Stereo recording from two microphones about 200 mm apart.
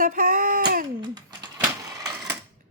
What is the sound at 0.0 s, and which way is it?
Speech, 45° right (ahead or behind).